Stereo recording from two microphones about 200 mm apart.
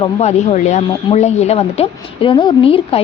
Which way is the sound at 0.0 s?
35° left (ahead or behind).